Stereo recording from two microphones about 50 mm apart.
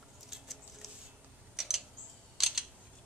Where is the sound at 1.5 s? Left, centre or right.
Centre.